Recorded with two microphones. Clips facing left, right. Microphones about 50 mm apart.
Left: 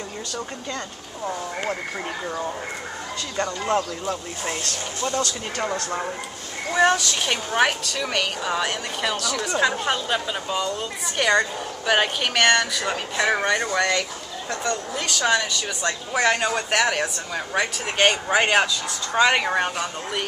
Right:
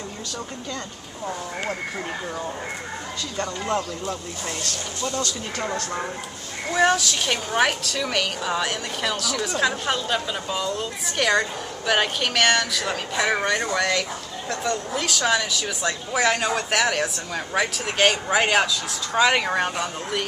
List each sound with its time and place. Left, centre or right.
1.2 s speech: centre
3.3 s speech: centre
6.7 s a woman's voice: centre